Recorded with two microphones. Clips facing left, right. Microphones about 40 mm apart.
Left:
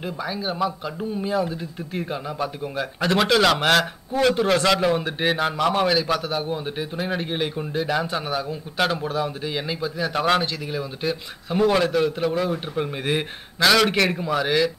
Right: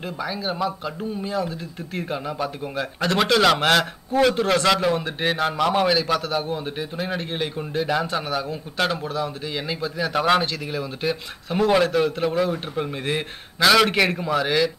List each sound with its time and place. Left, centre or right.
0.0 s speech: centre
2.0 s a man's voice: centre
9.0 s a man's voice: centre
9.7 s speech: centre